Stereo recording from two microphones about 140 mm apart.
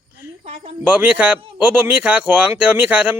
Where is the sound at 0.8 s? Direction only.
10° right (ahead or behind).